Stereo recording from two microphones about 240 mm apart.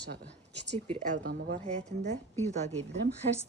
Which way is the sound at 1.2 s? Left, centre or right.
Right.